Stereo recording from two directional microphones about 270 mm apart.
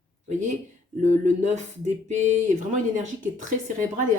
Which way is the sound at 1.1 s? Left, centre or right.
Right.